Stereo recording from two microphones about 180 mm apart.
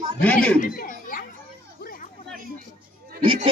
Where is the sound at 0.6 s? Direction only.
50° left (ahead or behind).